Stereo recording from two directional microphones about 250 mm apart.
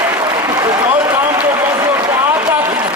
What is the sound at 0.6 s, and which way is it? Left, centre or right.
Run, centre.